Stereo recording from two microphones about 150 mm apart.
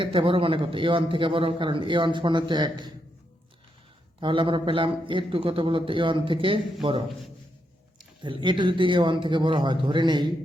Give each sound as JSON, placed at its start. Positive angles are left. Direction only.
{"t": 0.0, "sound": "a man's voice", "side_deg": -35}
{"t": 4.2, "sound": "a man's voice", "side_deg": -35}
{"t": 8.2, "sound": "a man's voice", "side_deg": -30}